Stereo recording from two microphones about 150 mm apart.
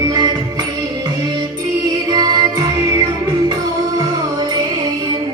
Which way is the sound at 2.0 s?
30° right (ahead or behind).